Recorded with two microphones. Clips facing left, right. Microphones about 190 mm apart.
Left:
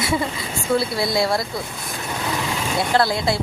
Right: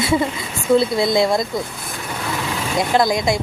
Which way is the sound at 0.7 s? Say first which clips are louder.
Right 5 dB; 20° right (ahead or behind).